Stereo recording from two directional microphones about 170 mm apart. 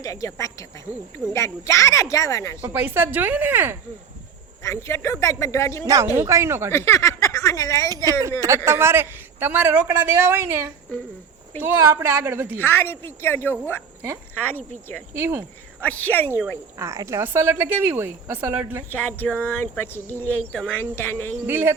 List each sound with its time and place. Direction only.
0.0 s a woman's voice: 20° left (ahead or behind)
2.6 s speech: 10° right (ahead or behind)
4.6 s speech: 15° left (ahead or behind)
5.8 s a woman's voice: 20° right (ahead or behind)
6.7 s speech: 15° left (ahead or behind)
8.4 s speech: 15° right (ahead or behind)
12.5 s speech: 10° left (ahead or behind)
15.1 s speech: 10° right (ahead or behind)
15.8 s speech: 10° left (ahead or behind)
16.7 s speech: 20° right (ahead or behind)
18.9 s speech: 10° left (ahead or behind)
21.4 s speech: 15° right (ahead or behind)